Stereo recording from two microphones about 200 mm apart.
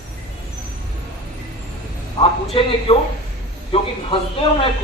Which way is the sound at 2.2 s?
30° left (ahead or behind).